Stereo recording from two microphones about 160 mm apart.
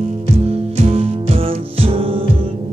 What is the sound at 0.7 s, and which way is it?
Music, 40° right (ahead or behind).